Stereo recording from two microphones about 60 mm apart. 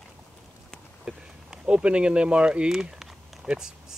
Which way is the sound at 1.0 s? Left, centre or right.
Centre.